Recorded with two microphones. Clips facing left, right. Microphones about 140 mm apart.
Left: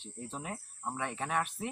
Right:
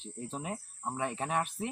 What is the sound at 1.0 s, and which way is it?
Speech, 35° right (ahead or behind).